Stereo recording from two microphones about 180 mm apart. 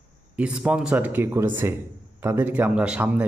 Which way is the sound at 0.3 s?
5° right (ahead or behind).